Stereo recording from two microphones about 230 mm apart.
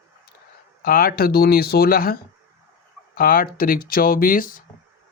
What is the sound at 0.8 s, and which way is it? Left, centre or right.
Speech, left.